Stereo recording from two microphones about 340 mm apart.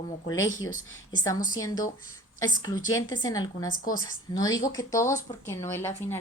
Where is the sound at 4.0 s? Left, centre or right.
Centre.